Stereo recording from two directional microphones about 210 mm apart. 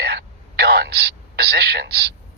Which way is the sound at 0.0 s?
50° right (ahead or behind).